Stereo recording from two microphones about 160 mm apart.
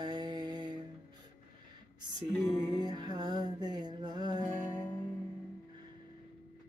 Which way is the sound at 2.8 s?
25° right (ahead or behind).